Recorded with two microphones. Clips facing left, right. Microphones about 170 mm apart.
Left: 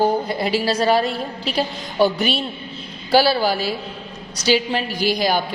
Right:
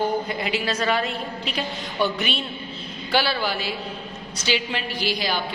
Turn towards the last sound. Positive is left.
turn(degrees=45)  # may be behind; listen again after turning